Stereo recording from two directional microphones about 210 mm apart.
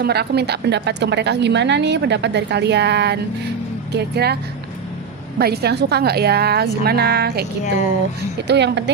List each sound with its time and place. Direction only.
0.0 s a woman's voice: 50° right (ahead or behind)
5.4 s a woman's voice: 50° right (ahead or behind)
8.4 s a woman's voice: 55° right (ahead or behind)